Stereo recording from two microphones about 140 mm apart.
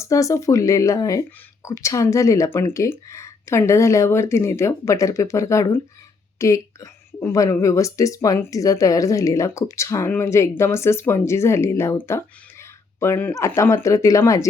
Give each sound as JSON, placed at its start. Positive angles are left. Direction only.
{"t": 0.0, "sound": "a woman's voice", "side_deg": 25}